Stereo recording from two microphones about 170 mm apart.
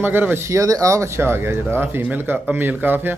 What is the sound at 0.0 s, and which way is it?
Speech, 10° right (ahead or behind).